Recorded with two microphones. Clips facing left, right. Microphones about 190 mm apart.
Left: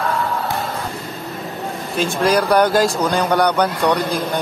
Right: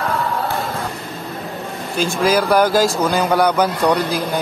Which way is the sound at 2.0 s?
Centre (ahead or behind).